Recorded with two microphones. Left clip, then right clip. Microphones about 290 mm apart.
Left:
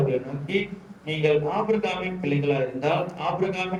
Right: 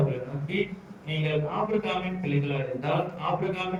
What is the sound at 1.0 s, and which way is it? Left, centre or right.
A man's voice, left.